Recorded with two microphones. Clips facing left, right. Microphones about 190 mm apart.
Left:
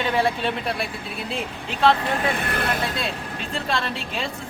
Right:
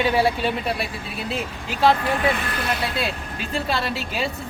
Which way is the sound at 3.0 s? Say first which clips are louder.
Right 2 dB; 5° right (ahead or behind).